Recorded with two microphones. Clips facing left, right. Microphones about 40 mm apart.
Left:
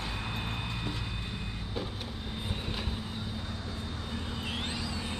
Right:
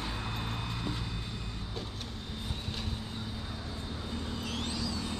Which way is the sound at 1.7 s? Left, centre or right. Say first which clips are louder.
Left 3 dB; centre.